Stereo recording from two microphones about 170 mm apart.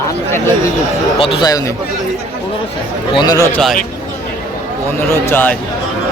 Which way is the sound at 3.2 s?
25° left (ahead or behind).